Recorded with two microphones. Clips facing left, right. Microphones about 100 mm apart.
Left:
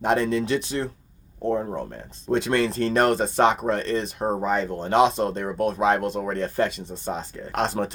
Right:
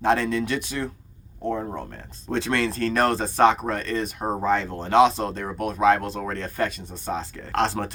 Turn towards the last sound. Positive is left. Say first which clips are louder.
# right 1 dB
turn(degrees=15)  # may be behind; listen again after turning